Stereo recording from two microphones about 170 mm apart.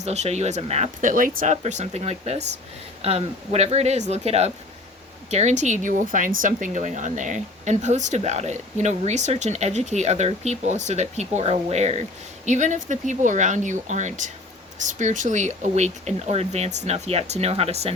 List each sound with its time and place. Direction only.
0.0 s speech: 40° right (ahead or behind)